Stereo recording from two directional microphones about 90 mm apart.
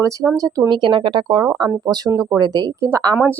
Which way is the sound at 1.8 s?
45° right (ahead or behind).